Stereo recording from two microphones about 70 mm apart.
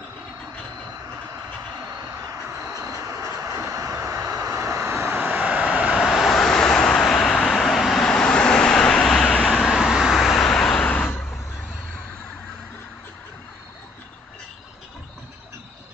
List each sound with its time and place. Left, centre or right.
2.0 s vehicle: right
4.9 s vehicle: right; by 9.5 s centre
9.5 s vehicle: centre
10.9 s vehicle: left